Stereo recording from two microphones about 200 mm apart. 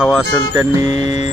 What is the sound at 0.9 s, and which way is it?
Music, 35° left (ahead or behind).